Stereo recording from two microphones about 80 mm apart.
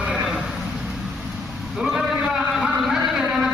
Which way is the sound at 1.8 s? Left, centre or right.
Centre.